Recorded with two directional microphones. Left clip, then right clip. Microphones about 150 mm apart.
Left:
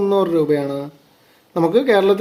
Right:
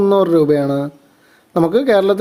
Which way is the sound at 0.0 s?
20° right (ahead or behind).